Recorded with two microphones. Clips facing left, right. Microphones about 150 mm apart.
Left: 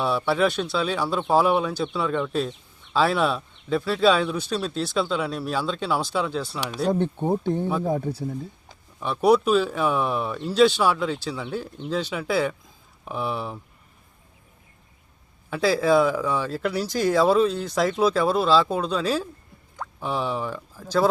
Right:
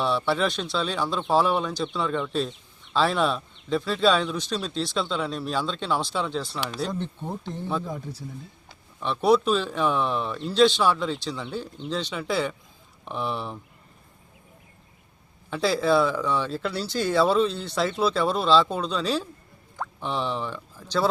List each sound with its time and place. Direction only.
0.0 s speech: 5° left (ahead or behind)
6.9 s speech: 55° left (ahead or behind)
9.0 s speech: 10° left (ahead or behind)
15.4 s speech: 5° left (ahead or behind)